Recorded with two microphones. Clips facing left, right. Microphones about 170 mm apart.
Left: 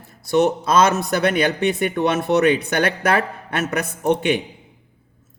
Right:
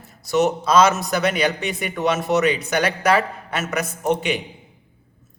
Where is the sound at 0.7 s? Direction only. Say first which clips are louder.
Even; 55° left (ahead or behind).